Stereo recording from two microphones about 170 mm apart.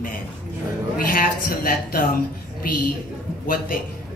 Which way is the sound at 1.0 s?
55° left (ahead or behind).